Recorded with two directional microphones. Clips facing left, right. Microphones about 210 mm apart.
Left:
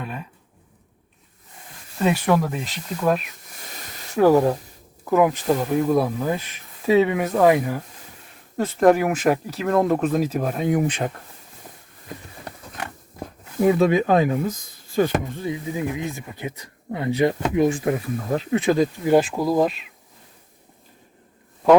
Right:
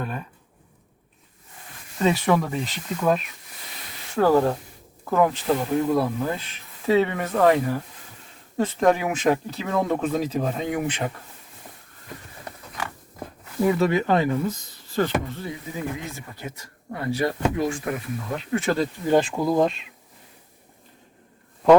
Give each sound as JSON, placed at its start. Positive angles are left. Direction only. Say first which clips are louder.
{"t": 0.0, "sound": "speech", "louder": "right 1 dB", "side_deg": 0}
{"t": 2.0, "sound": "speech", "louder": "left 1 dB", "side_deg": 5}
{"t": 4.2, "sound": "speech", "louder": "left 3 dB", "side_deg": 15}
{"t": 13.6, "sound": "speech", "louder": "left 3 dB", "side_deg": 20}
{"t": 18.6, "sound": "speech", "louder": "left 4 dB", "side_deg": 15}